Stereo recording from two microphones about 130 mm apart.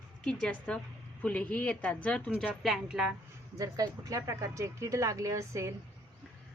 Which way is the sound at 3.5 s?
25° right (ahead or behind).